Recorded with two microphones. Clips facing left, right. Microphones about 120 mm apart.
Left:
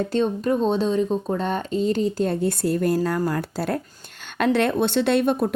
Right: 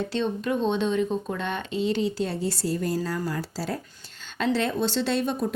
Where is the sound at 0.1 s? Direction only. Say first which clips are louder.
Left 5 dB; 40° left (ahead or behind).